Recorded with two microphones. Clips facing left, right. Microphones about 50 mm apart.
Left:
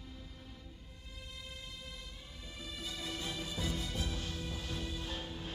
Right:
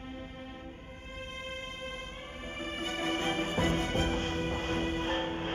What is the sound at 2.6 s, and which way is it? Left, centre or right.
Music, right.